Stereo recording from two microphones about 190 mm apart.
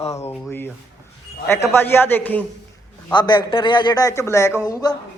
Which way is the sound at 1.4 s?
15° left (ahead or behind).